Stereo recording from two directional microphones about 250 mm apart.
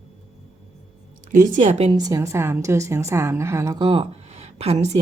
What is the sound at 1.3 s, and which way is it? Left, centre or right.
A woman's voice, right.